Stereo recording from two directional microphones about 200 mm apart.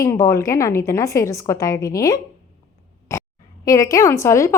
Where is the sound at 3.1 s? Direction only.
15° left (ahead or behind).